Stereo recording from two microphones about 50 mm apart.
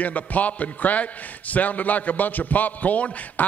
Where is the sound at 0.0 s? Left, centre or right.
Left.